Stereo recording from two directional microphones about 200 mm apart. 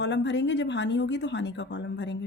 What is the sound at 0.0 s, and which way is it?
A woman's voice, 60° left (ahead or behind).